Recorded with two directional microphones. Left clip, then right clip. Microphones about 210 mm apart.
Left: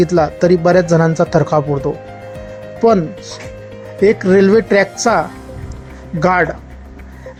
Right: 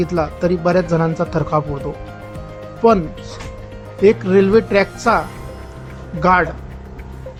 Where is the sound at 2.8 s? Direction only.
20° left (ahead or behind).